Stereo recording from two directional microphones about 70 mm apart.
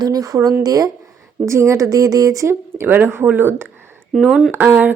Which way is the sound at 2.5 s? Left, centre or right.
Right.